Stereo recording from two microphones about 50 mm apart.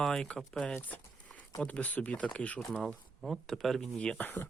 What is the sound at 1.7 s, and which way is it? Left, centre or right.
Speech, left.